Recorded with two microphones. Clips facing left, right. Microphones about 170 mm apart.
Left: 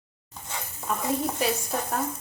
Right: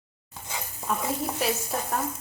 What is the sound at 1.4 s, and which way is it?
Speech, centre (ahead or behind).